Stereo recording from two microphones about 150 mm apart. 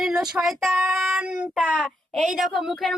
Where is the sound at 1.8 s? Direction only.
Centre (ahead or behind).